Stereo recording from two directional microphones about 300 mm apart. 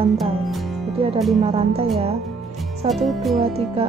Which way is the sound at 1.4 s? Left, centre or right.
Right.